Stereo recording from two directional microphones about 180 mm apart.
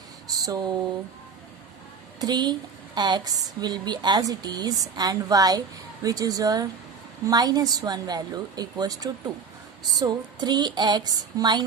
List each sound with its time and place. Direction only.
0.3 s speech: 20° right (ahead or behind)
2.2 s a woman's voice: 25° right (ahead or behind)